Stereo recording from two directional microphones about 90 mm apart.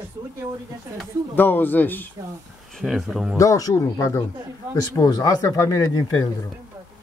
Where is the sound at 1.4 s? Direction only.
20° left (ahead or behind).